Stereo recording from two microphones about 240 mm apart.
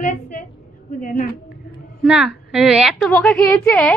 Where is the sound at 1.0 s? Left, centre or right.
Left.